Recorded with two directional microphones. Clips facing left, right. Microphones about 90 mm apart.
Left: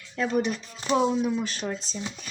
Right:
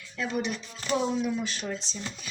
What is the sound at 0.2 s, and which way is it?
Speech, 40° left (ahead or behind).